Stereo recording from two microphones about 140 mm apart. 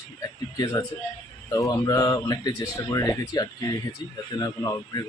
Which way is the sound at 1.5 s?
25° left (ahead or behind).